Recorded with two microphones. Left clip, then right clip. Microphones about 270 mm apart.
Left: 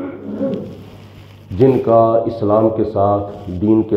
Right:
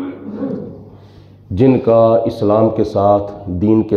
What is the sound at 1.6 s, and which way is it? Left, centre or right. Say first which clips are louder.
Speech: right 1 dB; right.